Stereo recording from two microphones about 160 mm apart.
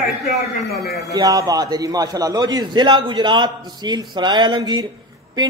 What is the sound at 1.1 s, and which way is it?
A man's voice, 20° right (ahead or behind).